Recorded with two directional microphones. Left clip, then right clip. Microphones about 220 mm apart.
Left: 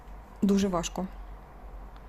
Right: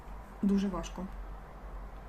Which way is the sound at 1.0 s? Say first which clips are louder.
Left 8 dB; 55° left (ahead or behind).